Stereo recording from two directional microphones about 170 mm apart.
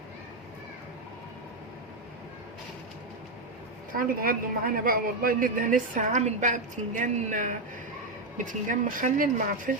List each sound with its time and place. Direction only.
3.9 s a woman's voice: 60° right (ahead or behind)